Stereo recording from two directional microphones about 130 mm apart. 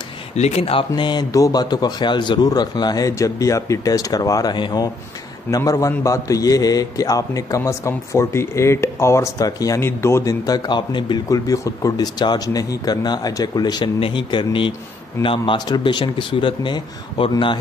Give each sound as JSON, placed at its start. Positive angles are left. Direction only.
{"t": 0.4, "sound": "a man's voice", "side_deg": 55}